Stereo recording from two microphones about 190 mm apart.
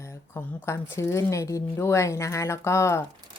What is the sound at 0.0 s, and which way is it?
A woman's voice, 15° left (ahead or behind).